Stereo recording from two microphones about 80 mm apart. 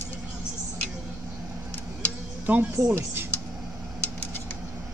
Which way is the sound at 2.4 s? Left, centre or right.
Right.